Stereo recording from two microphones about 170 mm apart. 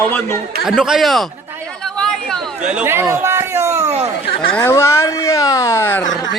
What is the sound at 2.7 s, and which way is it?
Chatter, 15° right (ahead or behind).